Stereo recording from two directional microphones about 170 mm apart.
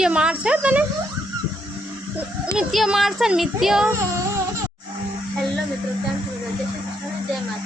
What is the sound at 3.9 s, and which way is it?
Child singing, 15° right (ahead or behind).